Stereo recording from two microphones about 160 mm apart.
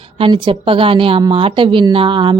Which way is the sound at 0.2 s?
30° right (ahead or behind).